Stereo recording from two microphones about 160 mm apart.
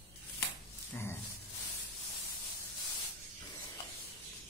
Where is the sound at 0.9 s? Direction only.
15° left (ahead or behind).